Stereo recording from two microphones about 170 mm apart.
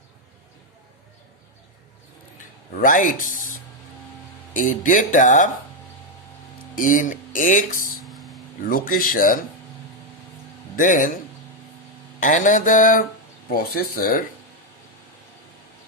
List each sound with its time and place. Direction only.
2.7 s speech: 50° left (ahead or behind)
4.5 s speech: 50° left (ahead or behind)
6.7 s speech: 50° left (ahead or behind)
8.0 s vehicle: centre (ahead or behind)
8.7 s speech: 55° left (ahead or behind)
10.8 s speech: 50° left (ahead or behind)
12.2 s speech: 50° left (ahead or behind)